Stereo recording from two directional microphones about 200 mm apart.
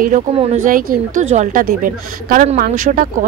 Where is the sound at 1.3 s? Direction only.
40° right (ahead or behind).